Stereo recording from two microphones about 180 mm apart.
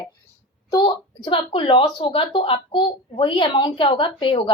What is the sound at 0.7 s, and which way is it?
Speech, 25° left (ahead or behind).